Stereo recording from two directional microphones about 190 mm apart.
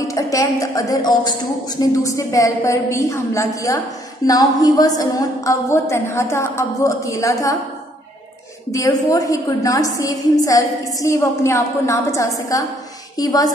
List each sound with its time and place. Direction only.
0.1 s a woman's voice: 15° left (ahead or behind)
8.7 s a woman's voice: 15° left (ahead or behind)